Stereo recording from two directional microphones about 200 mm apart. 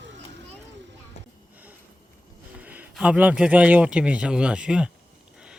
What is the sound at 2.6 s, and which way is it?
A man's voice, 5° right (ahead or behind).